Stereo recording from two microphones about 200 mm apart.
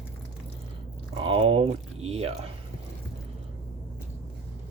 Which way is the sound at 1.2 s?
25° right (ahead or behind).